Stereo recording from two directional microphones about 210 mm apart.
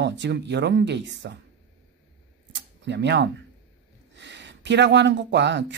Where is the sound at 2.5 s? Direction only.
55° right (ahead or behind).